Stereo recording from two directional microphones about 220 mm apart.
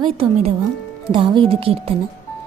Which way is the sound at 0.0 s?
25° right (ahead or behind).